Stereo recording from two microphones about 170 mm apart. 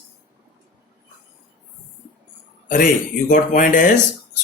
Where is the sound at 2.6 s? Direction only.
55° left (ahead or behind).